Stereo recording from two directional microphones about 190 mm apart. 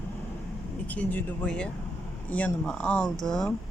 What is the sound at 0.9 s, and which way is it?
Speech, 10° left (ahead or behind).